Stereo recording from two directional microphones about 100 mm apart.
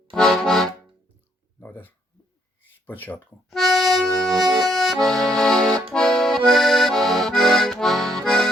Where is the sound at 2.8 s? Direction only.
20° left (ahead or behind).